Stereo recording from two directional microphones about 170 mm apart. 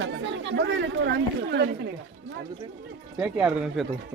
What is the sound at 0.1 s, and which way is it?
Speech, 90° right.